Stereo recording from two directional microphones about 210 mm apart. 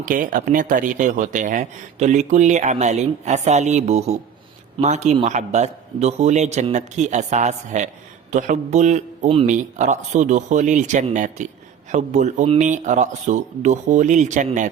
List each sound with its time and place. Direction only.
0.0 s speech: 40° right (ahead or behind)